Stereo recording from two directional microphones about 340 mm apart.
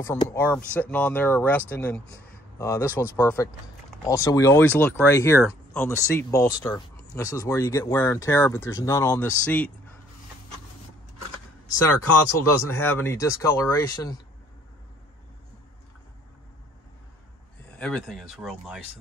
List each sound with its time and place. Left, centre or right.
0.0 s speech: centre
11.9 s speech: left
12.8 s speech: centre
17.7 s speech: centre